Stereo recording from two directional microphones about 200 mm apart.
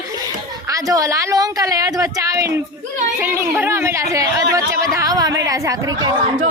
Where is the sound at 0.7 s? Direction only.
15° right (ahead or behind).